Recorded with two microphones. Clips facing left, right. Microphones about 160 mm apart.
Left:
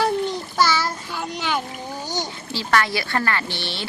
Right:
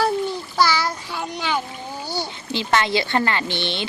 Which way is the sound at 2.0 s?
10° right (ahead or behind).